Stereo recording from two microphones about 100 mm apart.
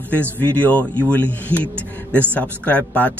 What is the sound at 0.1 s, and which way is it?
Speech, 15° left (ahead or behind).